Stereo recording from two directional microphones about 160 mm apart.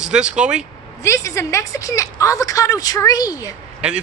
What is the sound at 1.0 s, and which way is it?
A woman's voice, 20° left (ahead or behind).